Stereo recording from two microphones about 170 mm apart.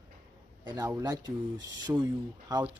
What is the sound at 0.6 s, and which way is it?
Speech, 25° right (ahead or behind).